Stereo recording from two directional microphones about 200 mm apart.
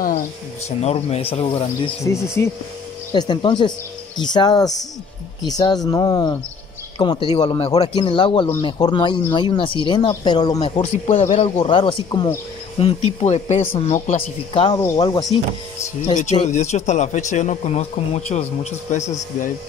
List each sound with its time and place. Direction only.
0.7 s speech: 30° left (ahead or behind)
1.9 s speech: 15° left (ahead or behind)
10.8 s speech: 35° left (ahead or behind); by 15.2 s 20° left (ahead or behind)
16.4 s speech: 35° left (ahead or behind)